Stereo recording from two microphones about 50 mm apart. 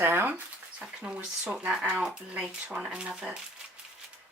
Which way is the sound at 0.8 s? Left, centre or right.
Right.